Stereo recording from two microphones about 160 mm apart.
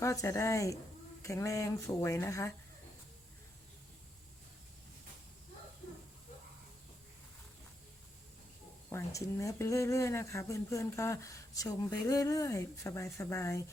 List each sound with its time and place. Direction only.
0.0 s speech: 20° left (ahead or behind)
8.9 s speech: 20° left (ahead or behind)